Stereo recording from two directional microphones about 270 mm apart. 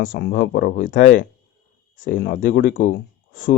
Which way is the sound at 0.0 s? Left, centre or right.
Left.